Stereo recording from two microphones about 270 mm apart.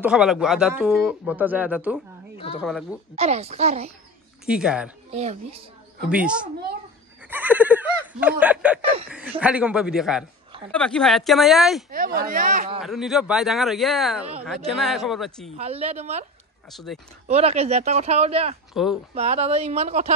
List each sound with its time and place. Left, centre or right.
0.0 s speech: centre
3.2 s speech: right
4.5 s speech: centre
5.1 s speech: right
6.0 s speech: centre
7.2 s a sound: centre
9.4 s speech: centre
11.9 s speech: right
12.8 s speech: centre
15.5 s speech: right
16.7 s speech: centre
17.3 s speech: right
18.7 s speech: centre
19.1 s speech: right